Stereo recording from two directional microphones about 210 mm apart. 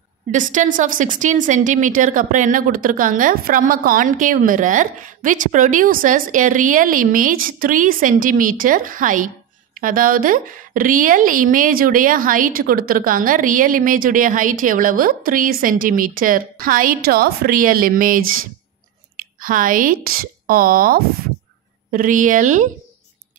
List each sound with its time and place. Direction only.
0.3 s a woman's voice: 35° right (ahead or behind)